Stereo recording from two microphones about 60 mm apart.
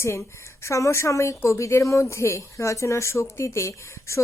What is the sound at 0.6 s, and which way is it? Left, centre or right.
A woman's voice, left.